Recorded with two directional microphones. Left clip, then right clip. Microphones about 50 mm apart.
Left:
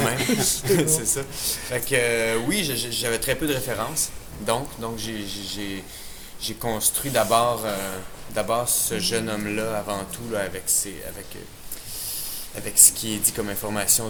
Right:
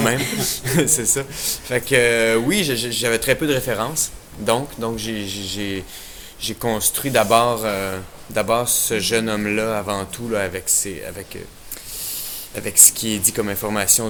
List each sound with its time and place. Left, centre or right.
0.3 s speech: right